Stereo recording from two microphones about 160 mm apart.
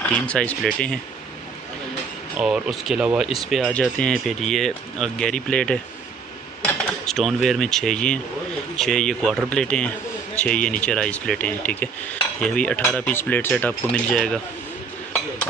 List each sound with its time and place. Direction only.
0.0 s a man's voice: 10° left (ahead or behind)
2.3 s a man's voice: 5° right (ahead or behind)